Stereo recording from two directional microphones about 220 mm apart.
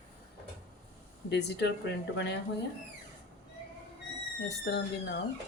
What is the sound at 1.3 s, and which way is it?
Speech, 50° left (ahead or behind).